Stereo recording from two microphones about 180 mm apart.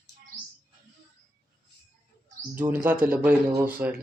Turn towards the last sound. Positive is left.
turn(degrees=-10)  # may be behind; listen again after turning